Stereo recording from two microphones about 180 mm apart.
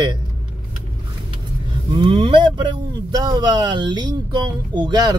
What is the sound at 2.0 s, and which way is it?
Speech, 30° right (ahead or behind).